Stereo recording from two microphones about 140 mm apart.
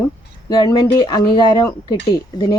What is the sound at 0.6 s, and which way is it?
A woman's voice, 30° left (ahead or behind).